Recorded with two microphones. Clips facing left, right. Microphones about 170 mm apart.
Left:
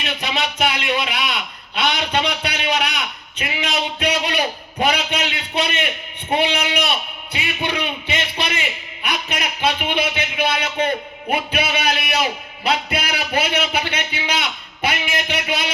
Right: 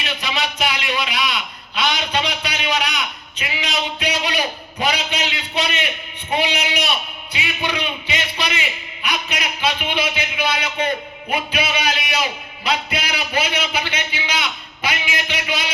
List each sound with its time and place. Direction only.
0.0 s a man's voice: 55° left (ahead or behind)